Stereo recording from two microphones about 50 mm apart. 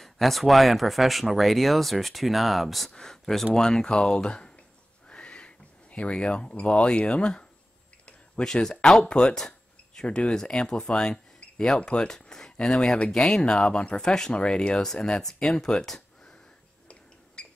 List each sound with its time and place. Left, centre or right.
0.0 s speech: centre
2.9 s speech: centre
5.0 s a sound: left
8.0 s speech: centre